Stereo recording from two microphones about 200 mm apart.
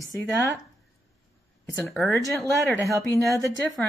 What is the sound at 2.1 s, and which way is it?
Speech, 15° left (ahead or behind).